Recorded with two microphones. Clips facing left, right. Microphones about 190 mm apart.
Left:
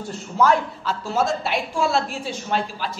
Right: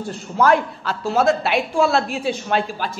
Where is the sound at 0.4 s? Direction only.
60° right (ahead or behind).